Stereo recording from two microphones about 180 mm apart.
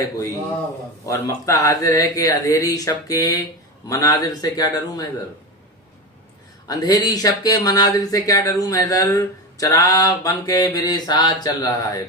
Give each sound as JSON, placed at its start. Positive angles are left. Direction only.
{"t": 1.0, "sound": "speech", "side_deg": 15}
{"t": 6.7, "sound": "speech", "side_deg": 20}